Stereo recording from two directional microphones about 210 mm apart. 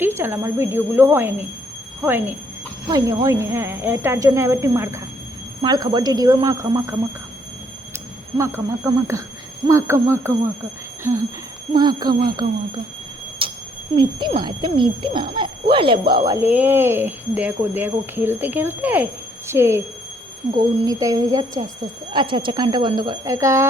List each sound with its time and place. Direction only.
0.0 s speech: 10° right (ahead or behind)
7.9 s speech: 10° right (ahead or behind)
11.7 s speech: 20° right (ahead or behind)
13.4 s a sound: 25° right (ahead or behind)
13.9 s speech: 20° right (ahead or behind)
20.8 s speech: 15° right (ahead or behind)